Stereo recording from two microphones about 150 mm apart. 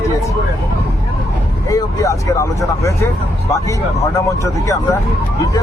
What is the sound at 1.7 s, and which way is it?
Speech, 20° left (ahead or behind).